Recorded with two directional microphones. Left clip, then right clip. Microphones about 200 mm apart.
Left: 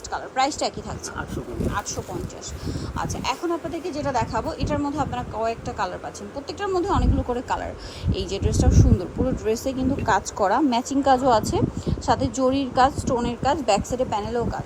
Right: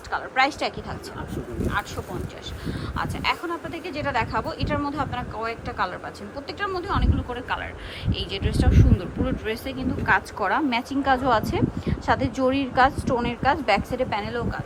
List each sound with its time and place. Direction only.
0.1 s speech: 15° left (ahead or behind)
2.6 s a woman's voice: 15° left (ahead or behind)